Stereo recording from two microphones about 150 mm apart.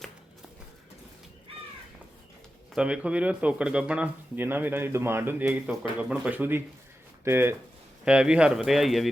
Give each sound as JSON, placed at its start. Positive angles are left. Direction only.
{"t": 2.7, "sound": "speech", "side_deg": -5}